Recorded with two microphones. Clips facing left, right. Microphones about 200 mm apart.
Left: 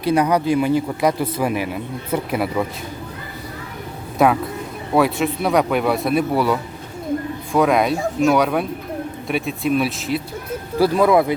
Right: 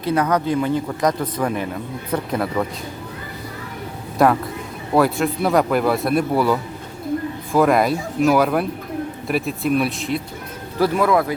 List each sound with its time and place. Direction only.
0.0 s speech: 10° left (ahead or behind)
4.2 s a man's voice: centre (ahead or behind)
10.8 s speech: 15° left (ahead or behind)